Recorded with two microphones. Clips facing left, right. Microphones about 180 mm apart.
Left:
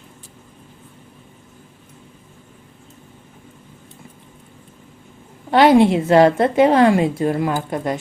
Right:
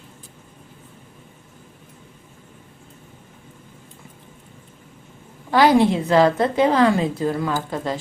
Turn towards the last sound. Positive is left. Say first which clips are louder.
# left 3 dB
turn(degrees=20)  # may be behind; listen again after turning